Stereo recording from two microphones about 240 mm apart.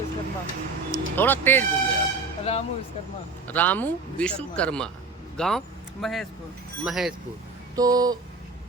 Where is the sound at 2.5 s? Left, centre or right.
Left.